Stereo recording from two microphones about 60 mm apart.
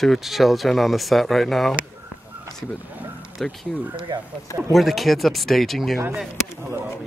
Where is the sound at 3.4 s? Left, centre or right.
Centre.